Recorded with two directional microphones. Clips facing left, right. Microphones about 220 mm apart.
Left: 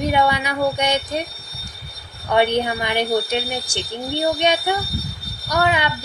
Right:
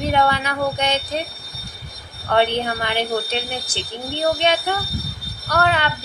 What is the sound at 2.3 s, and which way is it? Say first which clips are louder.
A woman's voice: left 1 dB; 15° left (ahead or behind).